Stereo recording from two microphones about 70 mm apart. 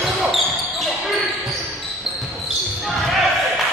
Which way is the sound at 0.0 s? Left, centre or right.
Centre.